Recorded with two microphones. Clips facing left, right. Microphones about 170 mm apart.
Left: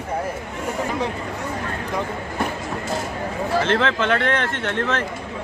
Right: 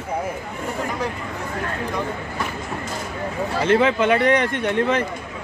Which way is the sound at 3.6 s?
10° right (ahead or behind).